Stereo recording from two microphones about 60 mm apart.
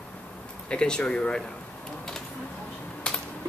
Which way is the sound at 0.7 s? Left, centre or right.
Centre.